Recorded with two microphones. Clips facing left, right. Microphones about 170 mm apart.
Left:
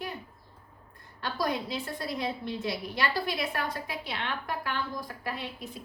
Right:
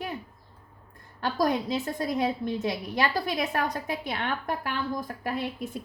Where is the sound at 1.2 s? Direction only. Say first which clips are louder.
Right 5 dB; 45° right (ahead or behind).